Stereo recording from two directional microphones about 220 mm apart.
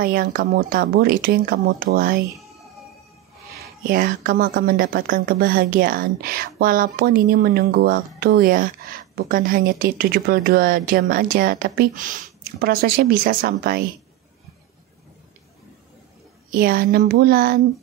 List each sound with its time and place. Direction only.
0.0 s speech: 40° right (ahead or behind)
3.8 s speech: 40° right (ahead or behind)
16.5 s speech: 40° right (ahead or behind)